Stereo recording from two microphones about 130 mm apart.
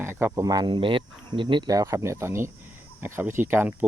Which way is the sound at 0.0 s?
15° right (ahead or behind).